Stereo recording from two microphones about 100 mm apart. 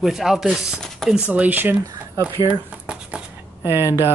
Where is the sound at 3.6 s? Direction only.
25° right (ahead or behind).